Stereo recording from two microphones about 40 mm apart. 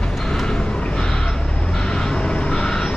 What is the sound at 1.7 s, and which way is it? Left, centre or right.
Vehicle, centre.